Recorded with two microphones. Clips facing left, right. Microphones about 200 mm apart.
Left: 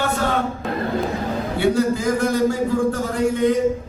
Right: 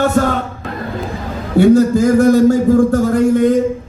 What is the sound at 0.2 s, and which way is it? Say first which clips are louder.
Music: right 9 dB; 45° right (ahead or behind).